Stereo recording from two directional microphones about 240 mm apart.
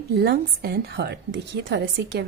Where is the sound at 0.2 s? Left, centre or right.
Right.